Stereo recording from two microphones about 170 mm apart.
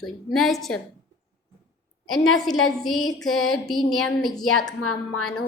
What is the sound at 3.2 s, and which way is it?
A woman's voice, centre (ahead or behind).